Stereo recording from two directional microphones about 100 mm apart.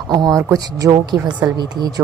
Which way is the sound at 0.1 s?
35° right (ahead or behind).